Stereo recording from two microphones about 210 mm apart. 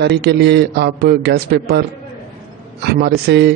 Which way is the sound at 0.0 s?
55° right (ahead or behind).